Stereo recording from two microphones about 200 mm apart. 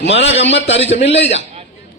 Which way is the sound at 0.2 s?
30° left (ahead or behind).